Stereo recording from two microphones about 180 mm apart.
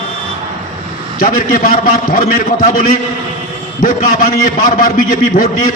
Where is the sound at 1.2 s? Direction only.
50° left (ahead or behind).